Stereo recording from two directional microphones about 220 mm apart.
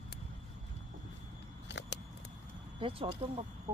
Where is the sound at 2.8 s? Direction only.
25° right (ahead or behind).